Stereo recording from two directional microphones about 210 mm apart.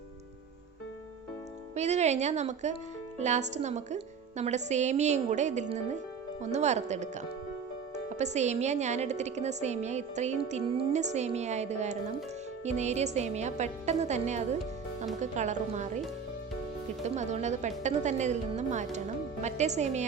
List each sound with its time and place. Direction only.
1.7 s a woman's voice: 30° right (ahead or behind)
17.0 s a woman's voice: 35° right (ahead or behind)